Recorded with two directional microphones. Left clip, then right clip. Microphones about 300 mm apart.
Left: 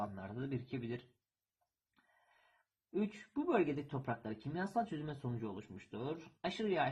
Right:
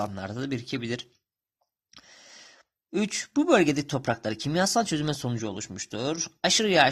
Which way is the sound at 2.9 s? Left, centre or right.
Right.